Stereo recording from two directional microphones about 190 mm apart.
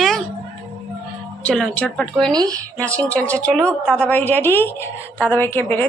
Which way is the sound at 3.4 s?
5° left (ahead or behind).